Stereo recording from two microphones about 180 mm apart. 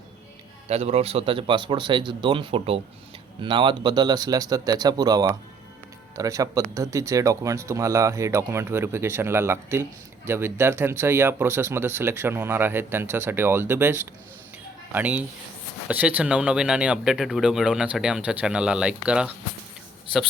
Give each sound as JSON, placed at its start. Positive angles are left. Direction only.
{"t": 0.7, "sound": "speech", "side_deg": -35}